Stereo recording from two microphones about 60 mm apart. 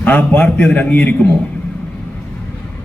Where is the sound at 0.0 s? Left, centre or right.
Left.